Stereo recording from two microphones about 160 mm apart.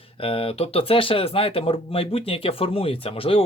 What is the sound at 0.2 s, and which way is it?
Speech, 35° left (ahead or behind).